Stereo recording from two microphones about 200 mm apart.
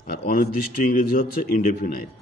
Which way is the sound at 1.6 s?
45° left (ahead or behind).